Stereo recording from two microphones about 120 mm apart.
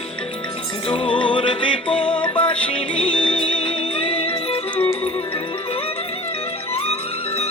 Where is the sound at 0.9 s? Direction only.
45° left (ahead or behind).